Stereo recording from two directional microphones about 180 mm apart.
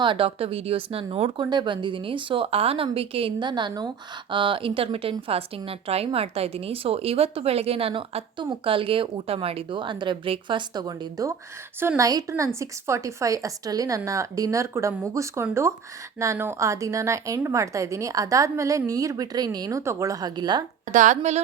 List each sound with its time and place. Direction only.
0.0 s a woman's voice: 30° right (ahead or behind)
20.9 s speech: 45° right (ahead or behind)